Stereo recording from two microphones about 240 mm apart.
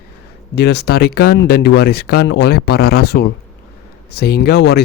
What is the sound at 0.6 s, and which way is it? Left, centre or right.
Speech, left.